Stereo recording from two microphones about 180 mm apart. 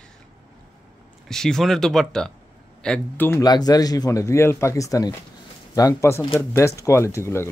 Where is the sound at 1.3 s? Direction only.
5° left (ahead or behind).